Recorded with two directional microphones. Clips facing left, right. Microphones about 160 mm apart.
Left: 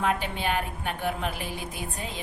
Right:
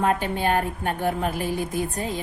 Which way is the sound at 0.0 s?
45° right (ahead or behind).